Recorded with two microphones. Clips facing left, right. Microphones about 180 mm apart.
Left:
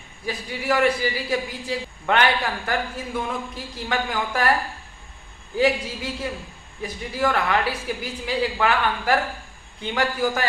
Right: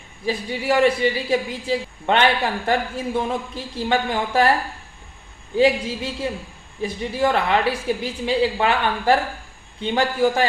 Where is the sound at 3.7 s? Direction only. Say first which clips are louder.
Right 5 dB; 30° right (ahead or behind).